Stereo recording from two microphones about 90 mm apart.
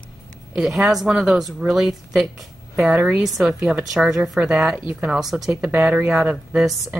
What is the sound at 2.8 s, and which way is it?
Speech, 15° right (ahead or behind).